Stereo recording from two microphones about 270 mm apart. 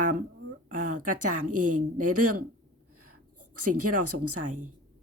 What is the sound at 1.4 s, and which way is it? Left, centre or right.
Speech, right.